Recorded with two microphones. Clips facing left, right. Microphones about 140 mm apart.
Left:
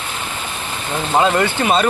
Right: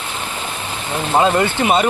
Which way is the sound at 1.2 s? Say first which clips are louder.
Right 1 dB; 20° right (ahead or behind).